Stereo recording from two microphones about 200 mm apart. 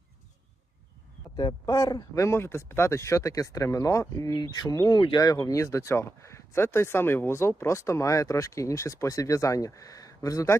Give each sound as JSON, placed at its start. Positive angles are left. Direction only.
{"t": 1.4, "sound": "speech", "side_deg": 20}